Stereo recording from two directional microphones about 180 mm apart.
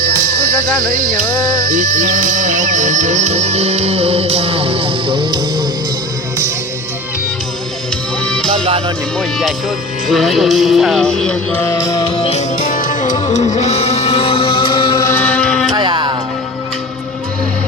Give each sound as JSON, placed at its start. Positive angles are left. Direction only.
{"t": 0.9, "sound": "a sound", "side_deg": -55}
{"t": 1.7, "sound": "music", "side_deg": -50}
{"t": 8.2, "sound": "music", "side_deg": 5}
{"t": 9.1, "sound": "speech", "side_deg": 0}
{"t": 11.9, "sound": "music", "side_deg": 25}
{"t": 15.0, "sound": "music", "side_deg": 10}
{"t": 15.7, "sound": "music", "side_deg": -25}